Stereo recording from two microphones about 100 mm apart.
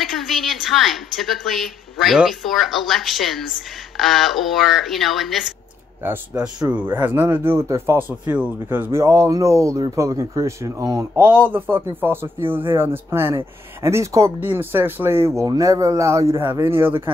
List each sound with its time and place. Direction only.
0.0 s a woman's voice: centre (ahead or behind)
6.0 s a man's voice: 20° right (ahead or behind)
11.1 s a man's voice: 20° right (ahead or behind)
15.4 s speech: 35° right (ahead or behind)